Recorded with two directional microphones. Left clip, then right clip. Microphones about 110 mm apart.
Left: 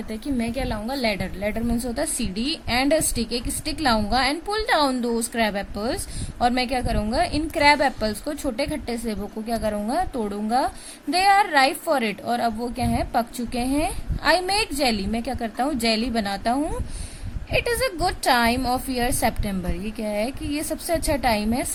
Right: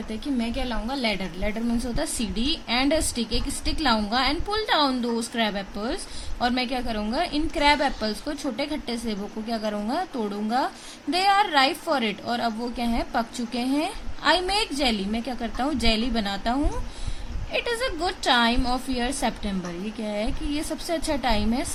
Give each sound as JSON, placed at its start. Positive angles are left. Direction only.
{"t": 0.4, "sound": "a woman's voice", "side_deg": 40}
{"t": 1.0, "sound": "a woman's voice", "side_deg": 25}